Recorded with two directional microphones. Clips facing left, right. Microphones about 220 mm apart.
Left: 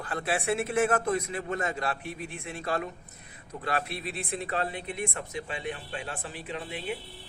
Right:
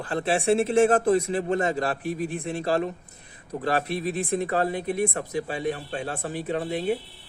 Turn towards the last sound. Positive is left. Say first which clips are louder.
# right 9 dB
turn(degrees=-40)  # may be behind; listen again after turning